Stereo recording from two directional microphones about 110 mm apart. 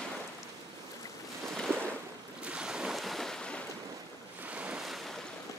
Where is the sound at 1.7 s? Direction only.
20° right (ahead or behind).